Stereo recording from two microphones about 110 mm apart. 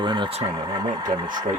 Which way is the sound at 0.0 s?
40° right (ahead or behind).